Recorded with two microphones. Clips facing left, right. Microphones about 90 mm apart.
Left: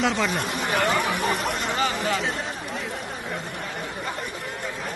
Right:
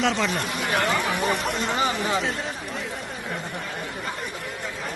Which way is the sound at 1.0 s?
Centre (ahead or behind).